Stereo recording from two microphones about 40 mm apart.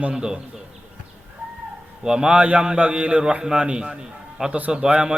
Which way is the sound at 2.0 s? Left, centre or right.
Centre.